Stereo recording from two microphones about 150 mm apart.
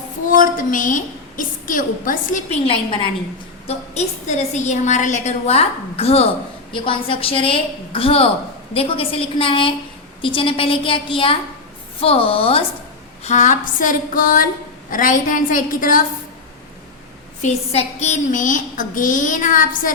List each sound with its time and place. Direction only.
0.3 s a woman's voice: 65° left (ahead or behind)
2.5 s a woman's voice: 35° left (ahead or behind)
3.7 s a woman's voice: 50° left (ahead or behind)
13.2 s a woman's voice: 55° left (ahead or behind)
17.4 s a woman's voice: 45° left (ahead or behind); by 19.9 s 60° left (ahead or behind)